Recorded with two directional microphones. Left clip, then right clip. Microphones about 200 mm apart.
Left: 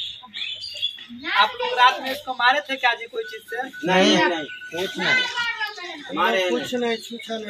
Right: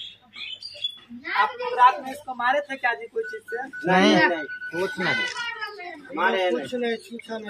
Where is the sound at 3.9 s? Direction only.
55° right (ahead or behind).